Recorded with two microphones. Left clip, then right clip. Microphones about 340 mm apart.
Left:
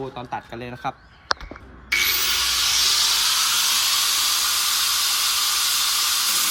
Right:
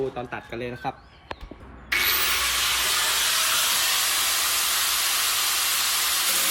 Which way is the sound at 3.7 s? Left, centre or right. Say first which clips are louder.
Left 3 dB; centre.